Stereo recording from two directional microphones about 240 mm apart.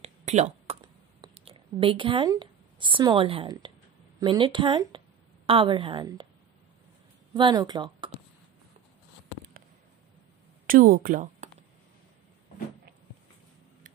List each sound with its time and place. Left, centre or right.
0.0 s a sound: right
1.2 s a woman's voice: right
7.3 s speech: centre
10.7 s speech: right